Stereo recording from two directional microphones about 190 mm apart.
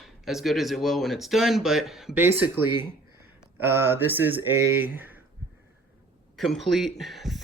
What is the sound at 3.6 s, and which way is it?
Speech, 10° right (ahead or behind).